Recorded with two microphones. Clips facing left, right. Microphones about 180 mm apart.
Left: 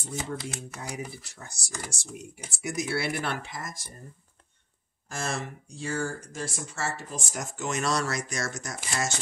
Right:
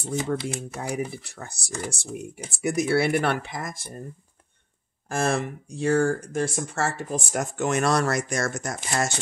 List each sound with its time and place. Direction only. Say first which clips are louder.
0.0 s speech: right 7 dB; 65° right (ahead or behind)
5.1 s speech: right 8 dB; 55° right (ahead or behind)